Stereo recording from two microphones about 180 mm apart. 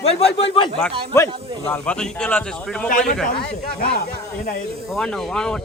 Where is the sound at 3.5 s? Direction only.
60° left (ahead or behind).